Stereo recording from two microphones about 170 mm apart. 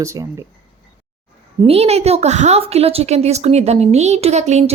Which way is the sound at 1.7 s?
35° right (ahead or behind).